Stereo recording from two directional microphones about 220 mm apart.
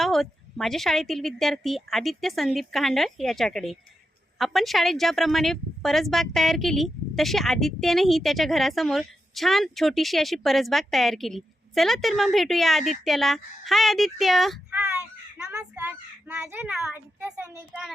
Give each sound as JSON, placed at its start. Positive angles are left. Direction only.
{"t": 0.0, "sound": "speech", "side_deg": 0}